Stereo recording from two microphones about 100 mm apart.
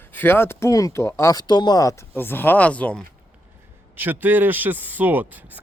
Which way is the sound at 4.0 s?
20° right (ahead or behind).